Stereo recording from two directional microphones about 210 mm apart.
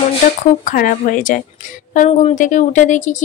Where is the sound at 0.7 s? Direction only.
40° left (ahead or behind).